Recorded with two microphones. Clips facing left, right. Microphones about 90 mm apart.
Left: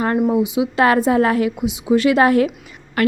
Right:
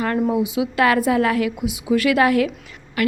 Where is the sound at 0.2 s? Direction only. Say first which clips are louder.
Left 3 dB; 15° left (ahead or behind).